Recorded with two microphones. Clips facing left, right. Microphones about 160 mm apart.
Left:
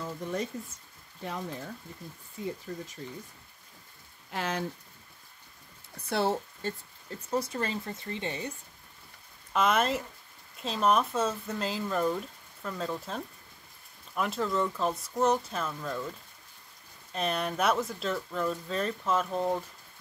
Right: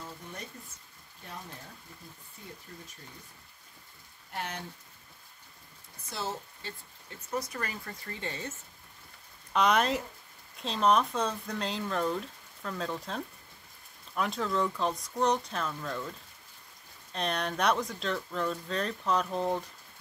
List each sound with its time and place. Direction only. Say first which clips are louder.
0.0 s a sound: left 10 dB; 90° left
1.2 s speech: left 9 dB; 90° left
2.4 s speech: left 13 dB; 90° left
4.3 s speech: left 6 dB; 90° left
6.0 s speech: left 9 dB; 60° left (ahead or behind)
7.2 s speech: left 4 dB; 30° left (ahead or behind)
9.5 s speech: even; centre (ahead or behind)